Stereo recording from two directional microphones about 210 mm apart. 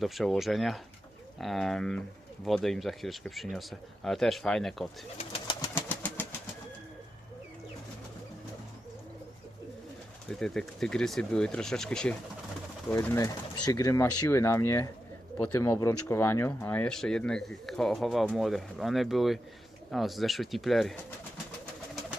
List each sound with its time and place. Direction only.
0.0 s speech: centre (ahead or behind)
5.1 s bird: 25° left (ahead or behind)
5.6 s engine: 10° left (ahead or behind)
10.2 s speech: centre (ahead or behind)